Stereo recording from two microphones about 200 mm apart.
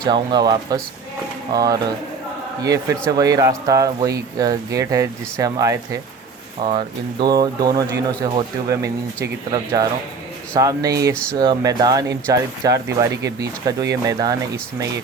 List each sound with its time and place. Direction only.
0.0 s speech: 20° right (ahead or behind)
10.5 s speech: 15° right (ahead or behind)
11.1 s speech: 5° left (ahead or behind)
11.3 s speech: 20° right (ahead or behind)